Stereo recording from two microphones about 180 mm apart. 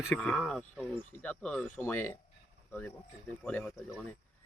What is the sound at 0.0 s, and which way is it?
Speech, 5° left (ahead or behind).